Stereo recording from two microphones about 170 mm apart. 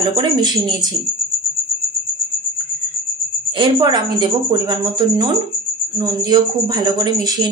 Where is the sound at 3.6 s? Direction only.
25° right (ahead or behind).